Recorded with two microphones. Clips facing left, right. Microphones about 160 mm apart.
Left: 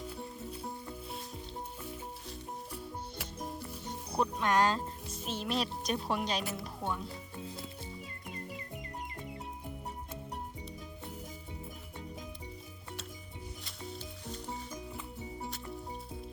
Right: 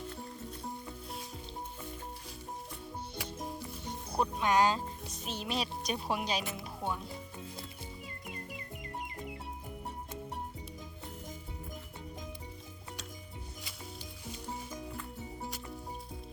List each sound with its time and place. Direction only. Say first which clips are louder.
3.2 s music: right 3 dB; centre (ahead or behind)
6.1 s speech: left 1 dB; 5° right (ahead or behind)
13.7 s music: left 3 dB; centre (ahead or behind)